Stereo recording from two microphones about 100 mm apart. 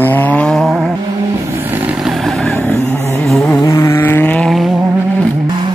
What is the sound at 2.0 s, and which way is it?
Vehicle, 5° left (ahead or behind).